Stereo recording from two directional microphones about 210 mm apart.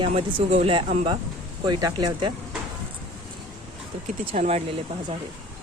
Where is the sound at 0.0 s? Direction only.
25° right (ahead or behind).